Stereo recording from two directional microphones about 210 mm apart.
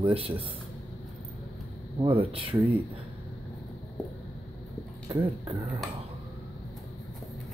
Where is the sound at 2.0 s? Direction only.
25° right (ahead or behind).